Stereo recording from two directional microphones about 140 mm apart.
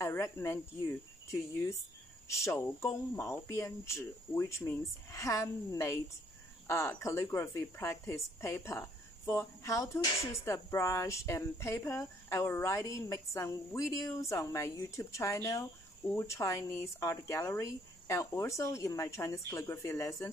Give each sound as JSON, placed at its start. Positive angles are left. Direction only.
{"t": 0.0, "sound": "speech", "side_deg": 20}
{"t": 10.1, "sound": "speech", "side_deg": 45}
{"t": 10.4, "sound": "speech", "side_deg": 20}